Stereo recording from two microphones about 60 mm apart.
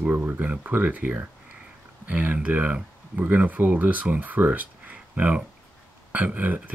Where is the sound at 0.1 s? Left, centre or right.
Right.